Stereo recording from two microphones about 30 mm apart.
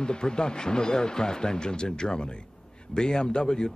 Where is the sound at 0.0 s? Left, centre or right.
Left.